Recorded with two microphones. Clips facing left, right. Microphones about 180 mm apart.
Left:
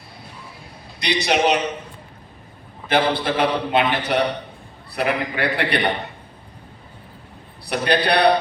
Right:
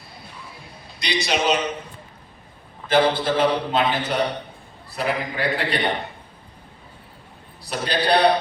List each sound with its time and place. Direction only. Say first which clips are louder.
0.9 s a man's voice: left 3 dB; 65° left (ahead or behind)
2.9 s a man's voice: right 1 dB; 65° left (ahead or behind)
7.6 s a man's voice: left 4 dB; 65° left (ahead or behind)